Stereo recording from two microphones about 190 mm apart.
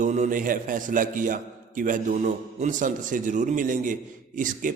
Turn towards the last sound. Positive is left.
turn(degrees=-45)  # may be behind; listen again after turning